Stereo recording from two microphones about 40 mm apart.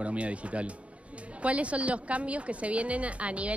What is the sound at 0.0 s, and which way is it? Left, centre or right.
Speech, right.